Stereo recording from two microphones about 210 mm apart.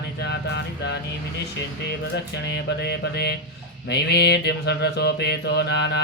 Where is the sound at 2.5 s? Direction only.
55° left (ahead or behind).